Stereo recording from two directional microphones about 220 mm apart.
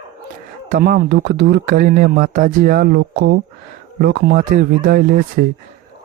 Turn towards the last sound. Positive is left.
turn(degrees=-45)  # may be behind; listen again after turning